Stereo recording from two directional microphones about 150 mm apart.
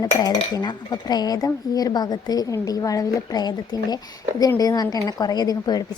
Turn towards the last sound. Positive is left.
turn(degrees=25)  # may be behind; listen again after turning